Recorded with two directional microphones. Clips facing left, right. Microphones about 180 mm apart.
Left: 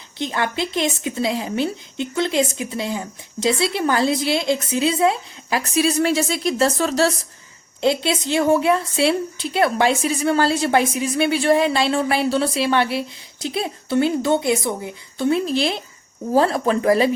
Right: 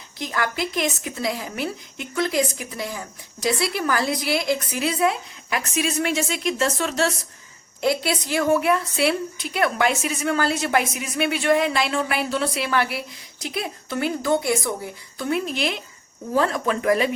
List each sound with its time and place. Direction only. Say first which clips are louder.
0.2 s a woman's voice: left 3 dB; 25° left (ahead or behind)
7.8 s a woman's voice: left 3 dB; 25° left (ahead or behind)